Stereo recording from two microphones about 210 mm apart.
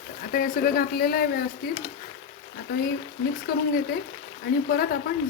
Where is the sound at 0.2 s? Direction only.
40° left (ahead or behind).